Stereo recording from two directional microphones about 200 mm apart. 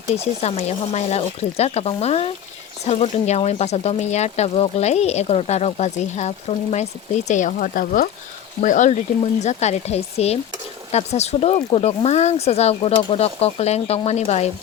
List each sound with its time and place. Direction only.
0.1 s speech: 35° left (ahead or behind)